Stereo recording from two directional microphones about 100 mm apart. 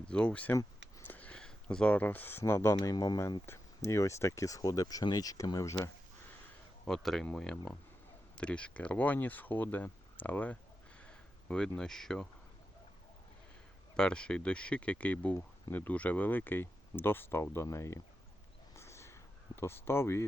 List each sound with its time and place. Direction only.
0.1 s speech: 10° left (ahead or behind)
1.0 s a sound: 15° left (ahead or behind)
2.4 s speech: 25° left (ahead or behind)
2.9 s speech: 40° left (ahead or behind)
3.4 s speech: 25° left (ahead or behind)
6.8 s speech: 5° left (ahead or behind)
13.9 s speech: 10° left (ahead or behind); by 18.0 s 30° left (ahead or behind)
18.7 s a sound: 30° left (ahead or behind)